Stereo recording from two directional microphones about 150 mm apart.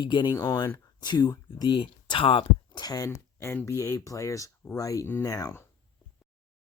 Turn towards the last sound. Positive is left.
turn(degrees=20)  # may be behind; listen again after turning